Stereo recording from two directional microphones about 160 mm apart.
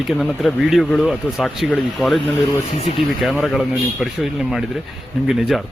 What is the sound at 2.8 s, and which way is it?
Speech, 40° left (ahead or behind).